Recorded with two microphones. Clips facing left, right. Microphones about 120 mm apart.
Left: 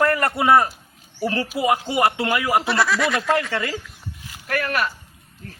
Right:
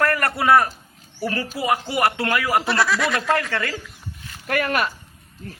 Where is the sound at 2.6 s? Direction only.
Centre (ahead or behind).